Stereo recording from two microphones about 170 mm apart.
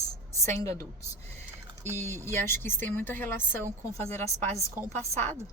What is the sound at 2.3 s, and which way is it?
Speech, 15° left (ahead or behind).